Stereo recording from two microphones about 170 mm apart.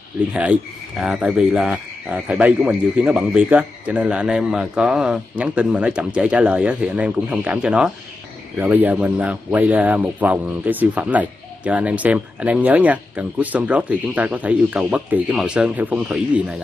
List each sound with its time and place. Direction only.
0.3 s speech: 5° right (ahead or behind)